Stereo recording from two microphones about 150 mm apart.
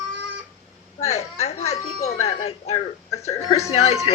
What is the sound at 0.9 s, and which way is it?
A woman's voice, 45° left (ahead or behind).